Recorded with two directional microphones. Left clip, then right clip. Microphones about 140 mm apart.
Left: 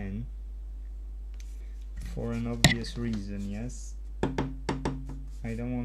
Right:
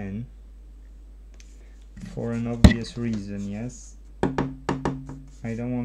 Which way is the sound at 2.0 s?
Centre (ahead or behind).